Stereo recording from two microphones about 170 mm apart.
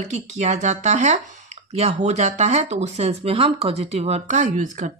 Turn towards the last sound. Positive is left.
turn(degrees=-50)  # may be behind; listen again after turning